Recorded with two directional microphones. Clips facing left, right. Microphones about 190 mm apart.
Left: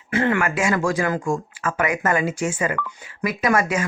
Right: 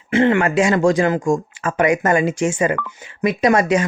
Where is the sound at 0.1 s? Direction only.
25° right (ahead or behind).